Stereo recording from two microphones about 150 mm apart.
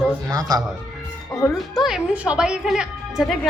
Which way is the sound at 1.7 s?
5° right (ahead or behind).